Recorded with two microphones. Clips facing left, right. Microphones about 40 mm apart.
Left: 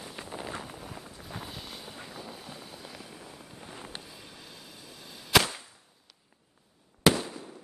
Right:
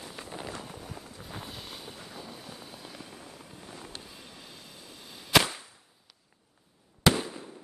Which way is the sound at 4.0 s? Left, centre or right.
Centre.